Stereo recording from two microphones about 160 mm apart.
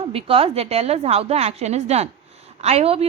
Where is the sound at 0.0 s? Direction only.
35° right (ahead or behind).